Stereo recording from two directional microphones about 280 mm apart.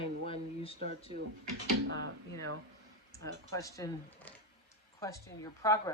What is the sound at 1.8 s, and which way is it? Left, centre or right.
Speech, right.